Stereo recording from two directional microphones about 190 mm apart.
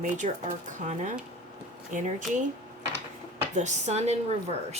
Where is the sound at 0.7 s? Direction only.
40° right (ahead or behind).